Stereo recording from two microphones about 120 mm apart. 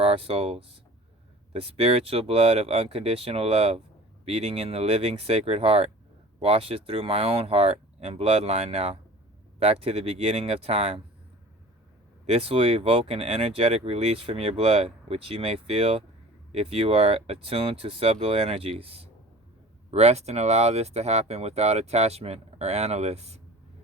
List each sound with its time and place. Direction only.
0.0 s speech: 55° right (ahead or behind)
12.2 s speech: 55° right (ahead or behind)